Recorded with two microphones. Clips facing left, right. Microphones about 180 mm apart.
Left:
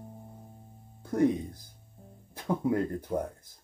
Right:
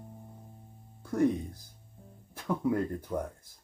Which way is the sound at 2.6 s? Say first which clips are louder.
Left 1 dB; 25° left (ahead or behind).